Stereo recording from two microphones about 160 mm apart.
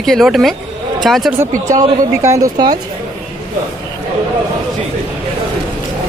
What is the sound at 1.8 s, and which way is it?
A woman's voice, 20° right (ahead or behind).